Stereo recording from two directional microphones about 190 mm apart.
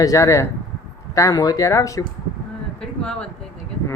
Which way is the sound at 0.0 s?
15° left (ahead or behind).